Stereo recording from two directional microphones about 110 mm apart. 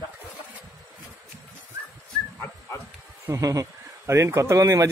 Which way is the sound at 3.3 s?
30° right (ahead or behind).